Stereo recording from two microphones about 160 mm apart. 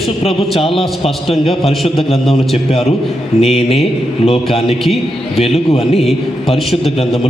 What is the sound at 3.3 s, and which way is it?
A man's voice, 40° left (ahead or behind).